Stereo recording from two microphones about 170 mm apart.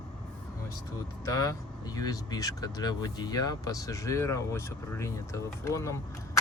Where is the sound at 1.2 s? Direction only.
20° left (ahead or behind).